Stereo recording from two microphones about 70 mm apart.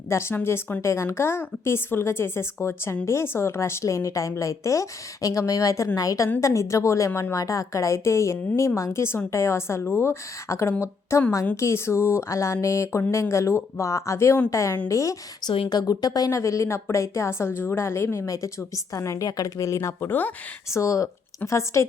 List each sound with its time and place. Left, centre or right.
0.1 s speech: left
15.4 s speech: left
16.4 s speech: left
20.1 s speech: left
20.7 s speech: left